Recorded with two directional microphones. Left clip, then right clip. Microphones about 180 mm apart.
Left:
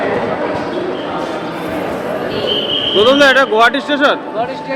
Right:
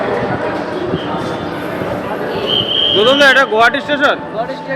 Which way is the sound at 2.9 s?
15° left (ahead or behind).